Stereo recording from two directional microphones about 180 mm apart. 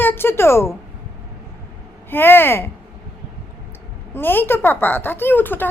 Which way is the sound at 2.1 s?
10° left (ahead or behind).